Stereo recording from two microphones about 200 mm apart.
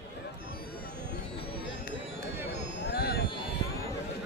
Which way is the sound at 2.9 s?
50° left (ahead or behind).